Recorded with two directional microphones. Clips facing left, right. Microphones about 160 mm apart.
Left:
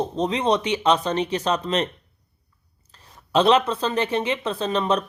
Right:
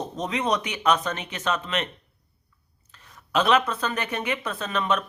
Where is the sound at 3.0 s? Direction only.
30° left (ahead or behind).